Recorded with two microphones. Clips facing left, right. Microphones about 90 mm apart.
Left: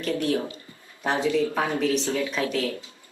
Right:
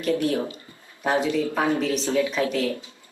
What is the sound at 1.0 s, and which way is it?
Speech, 10° right (ahead or behind).